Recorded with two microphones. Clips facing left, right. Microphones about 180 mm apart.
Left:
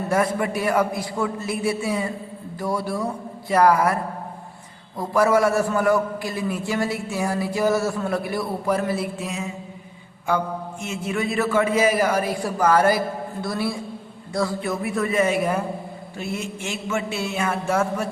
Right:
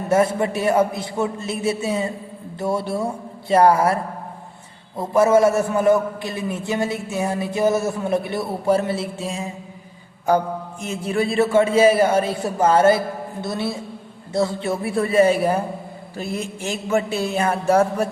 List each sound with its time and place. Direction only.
0.1 s a man's voice: 25° right (ahead or behind)
4.9 s a man's voice: 20° right (ahead or behind)
14.3 s a sound: 25° right (ahead or behind)